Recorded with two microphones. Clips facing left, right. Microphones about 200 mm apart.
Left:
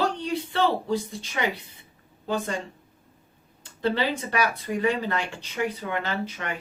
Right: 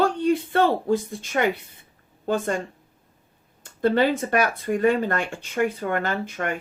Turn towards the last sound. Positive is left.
turn(degrees=-50)  # may be behind; listen again after turning